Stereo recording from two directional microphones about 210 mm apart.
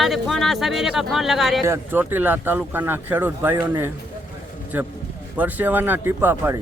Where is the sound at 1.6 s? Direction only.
10° right (ahead or behind).